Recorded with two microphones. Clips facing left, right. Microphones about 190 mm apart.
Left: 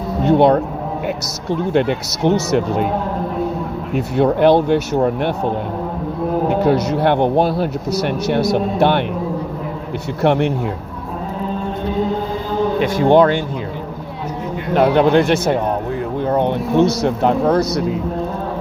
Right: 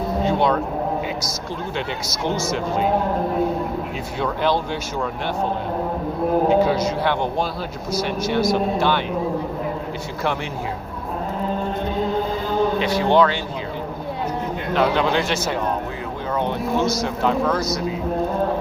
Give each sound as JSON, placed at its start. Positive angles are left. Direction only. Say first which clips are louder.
{"t": 0.3, "sound": "speech", "louder": "left 9 dB", "side_deg": 60}
{"t": 4.4, "sound": "speech", "louder": "left 9 dB", "side_deg": 60}
{"t": 6.5, "sound": "speech", "louder": "left 2 dB", "side_deg": 65}
{"t": 10.2, "sound": "speech", "louder": "left 10 dB", "side_deg": 60}
{"t": 12.8, "sound": "speech", "louder": "left 7 dB", "side_deg": 50}
{"t": 14.7, "sound": "speech", "louder": "left 7 dB", "side_deg": 55}
{"t": 16.7, "sound": "speech", "louder": "left 8 dB", "side_deg": 65}